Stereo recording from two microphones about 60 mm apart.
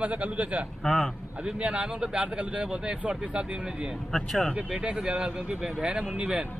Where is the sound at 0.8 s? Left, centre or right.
Centre.